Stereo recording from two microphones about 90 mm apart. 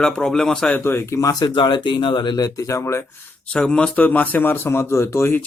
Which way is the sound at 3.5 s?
10° left (ahead or behind).